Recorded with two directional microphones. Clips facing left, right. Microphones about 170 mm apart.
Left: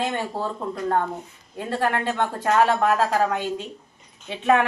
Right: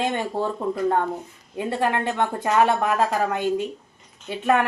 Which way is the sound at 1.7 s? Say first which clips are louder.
Even; 15° right (ahead or behind).